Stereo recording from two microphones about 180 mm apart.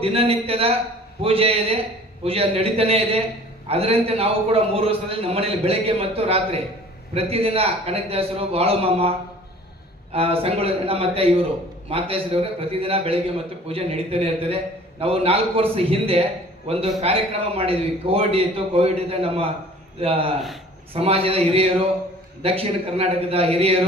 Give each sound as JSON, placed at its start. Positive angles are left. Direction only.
{"t": 0.0, "sound": "a man's voice", "side_deg": -35}